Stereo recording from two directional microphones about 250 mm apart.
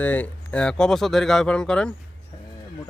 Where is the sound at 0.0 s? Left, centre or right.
Centre.